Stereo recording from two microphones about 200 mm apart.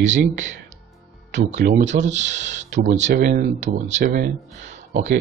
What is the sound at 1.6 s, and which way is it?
Speech, 45° right (ahead or behind).